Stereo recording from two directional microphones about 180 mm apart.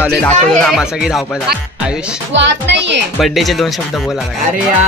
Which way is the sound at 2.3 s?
80° right.